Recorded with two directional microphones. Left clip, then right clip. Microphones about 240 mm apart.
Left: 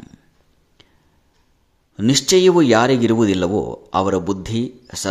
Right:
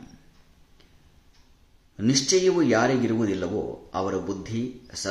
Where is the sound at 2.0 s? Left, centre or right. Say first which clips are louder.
Left 7 dB; left.